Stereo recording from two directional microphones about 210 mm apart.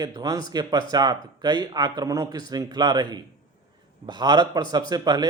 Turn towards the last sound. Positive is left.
turn(degrees=-20)  # may be behind; listen again after turning